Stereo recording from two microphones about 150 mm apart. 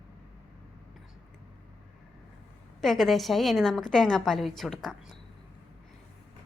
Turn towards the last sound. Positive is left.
turn(degrees=0)  # may be behind; listen again after turning